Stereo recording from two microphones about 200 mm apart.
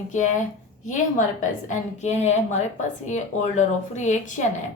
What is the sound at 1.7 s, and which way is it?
A woman's voice, 35° left (ahead or behind).